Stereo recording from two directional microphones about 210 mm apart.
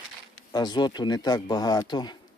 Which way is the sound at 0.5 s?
20° left (ahead or behind).